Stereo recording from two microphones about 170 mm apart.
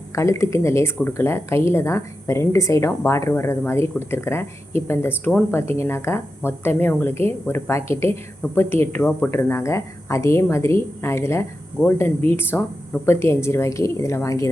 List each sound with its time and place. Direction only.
0.1 s speech: 15° left (ahead or behind)